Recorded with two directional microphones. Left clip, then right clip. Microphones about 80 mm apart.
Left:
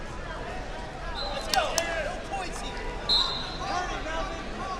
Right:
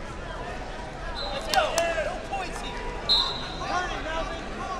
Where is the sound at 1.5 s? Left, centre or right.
Right.